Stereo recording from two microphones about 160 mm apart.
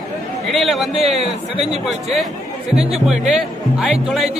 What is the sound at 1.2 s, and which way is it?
Speech, 40° right (ahead or behind).